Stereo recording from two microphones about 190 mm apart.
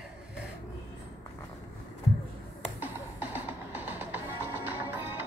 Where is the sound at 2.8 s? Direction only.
10° right (ahead or behind).